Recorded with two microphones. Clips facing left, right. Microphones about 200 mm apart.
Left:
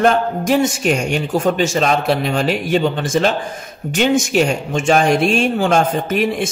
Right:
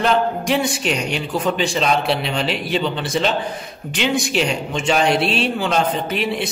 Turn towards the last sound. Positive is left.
turn(degrees=45)  # may be behind; listen again after turning